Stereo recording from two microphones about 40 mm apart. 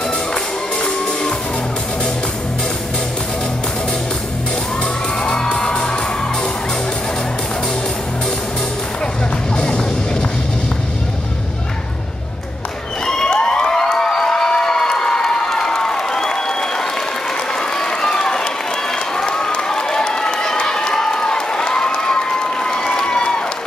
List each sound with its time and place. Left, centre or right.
0.8 s music: centre
5.2 s music: centre
9.6 s music: left
13.0 s cheering: centre
13.3 s a sound: left
17.6 s run: centre